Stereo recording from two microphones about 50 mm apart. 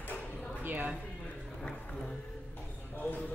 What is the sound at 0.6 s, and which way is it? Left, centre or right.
Speech, right.